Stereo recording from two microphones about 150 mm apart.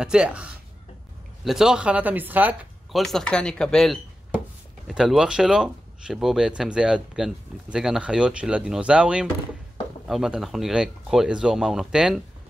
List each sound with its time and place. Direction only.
0.0 s speech: 5° right (ahead or behind)
2.9 s speech: centre (ahead or behind)